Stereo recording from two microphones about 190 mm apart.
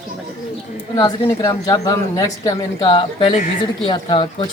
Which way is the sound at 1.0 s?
20° left (ahead or behind).